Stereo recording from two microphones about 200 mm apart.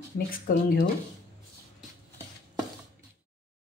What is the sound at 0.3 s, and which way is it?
Speech, 50° left (ahead or behind).